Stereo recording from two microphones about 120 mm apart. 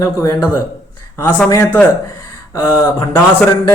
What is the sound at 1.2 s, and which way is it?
Speech, 20° left (ahead or behind).